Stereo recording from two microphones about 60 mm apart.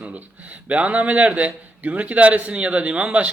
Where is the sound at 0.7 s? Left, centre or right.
Right.